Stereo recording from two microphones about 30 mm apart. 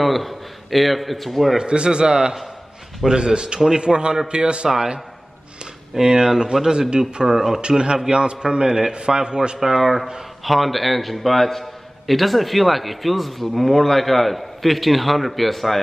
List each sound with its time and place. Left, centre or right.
0.0 s a man's voice: centre
1.6 s a man's voice: right
5.9 s a man's voice: right
7.2 s speech: centre
7.6 s a man's voice: right
9.6 s a man's voice: centre